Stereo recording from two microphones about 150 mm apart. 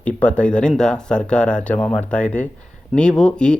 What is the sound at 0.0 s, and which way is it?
Speech, 10° left (ahead or behind).